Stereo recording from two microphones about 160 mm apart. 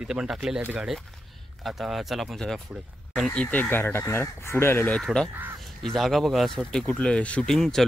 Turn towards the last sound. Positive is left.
turn(degrees=5)  # may be behind; listen again after turning